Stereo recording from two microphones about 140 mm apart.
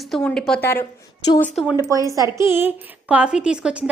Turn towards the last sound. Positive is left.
turn(degrees=-5)  # may be behind; listen again after turning